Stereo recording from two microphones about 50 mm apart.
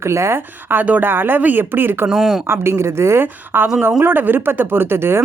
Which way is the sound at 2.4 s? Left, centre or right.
Right.